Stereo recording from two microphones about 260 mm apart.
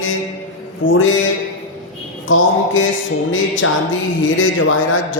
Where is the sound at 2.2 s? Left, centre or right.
Left.